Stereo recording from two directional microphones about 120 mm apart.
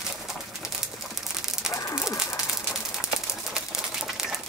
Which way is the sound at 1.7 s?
25° left (ahead or behind).